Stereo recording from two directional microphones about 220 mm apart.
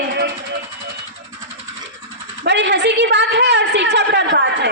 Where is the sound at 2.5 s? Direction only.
50° right (ahead or behind).